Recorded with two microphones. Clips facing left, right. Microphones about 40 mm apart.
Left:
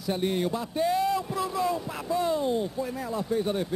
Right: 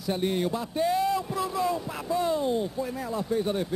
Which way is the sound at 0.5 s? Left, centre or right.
Centre.